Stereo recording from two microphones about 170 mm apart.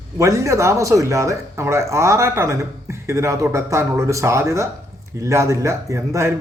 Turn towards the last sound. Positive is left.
turn(degrees=-15)  # may be behind; listen again after turning